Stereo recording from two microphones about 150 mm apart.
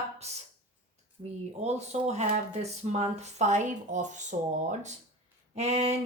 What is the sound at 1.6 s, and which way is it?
Speech, 45° right (ahead or behind).